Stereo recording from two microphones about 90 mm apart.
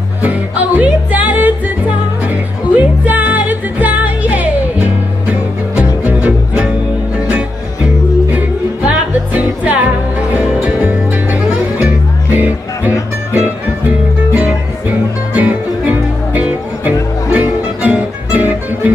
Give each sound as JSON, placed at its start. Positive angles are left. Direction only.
{"t": 0.2, "sound": "music", "side_deg": -15}